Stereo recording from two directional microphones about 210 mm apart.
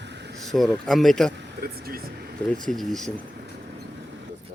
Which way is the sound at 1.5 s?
45° right (ahead or behind).